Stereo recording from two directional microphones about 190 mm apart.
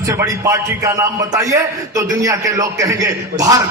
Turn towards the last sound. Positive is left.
turn(degrees=-15)  # may be behind; listen again after turning